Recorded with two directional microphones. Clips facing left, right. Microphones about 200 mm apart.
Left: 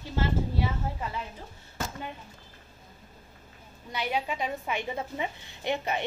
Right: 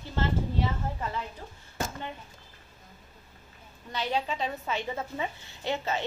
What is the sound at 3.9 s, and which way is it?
A woman's voice, 10° left (ahead or behind).